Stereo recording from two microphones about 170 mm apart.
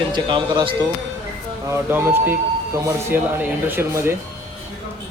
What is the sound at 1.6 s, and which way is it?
A man's voice, 10° right (ahead or behind).